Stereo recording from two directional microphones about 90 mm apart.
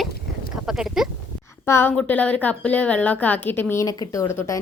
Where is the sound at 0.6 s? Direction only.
5° right (ahead or behind).